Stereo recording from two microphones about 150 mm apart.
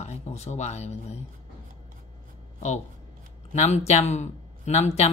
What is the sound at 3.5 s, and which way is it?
Speech, 50° left (ahead or behind).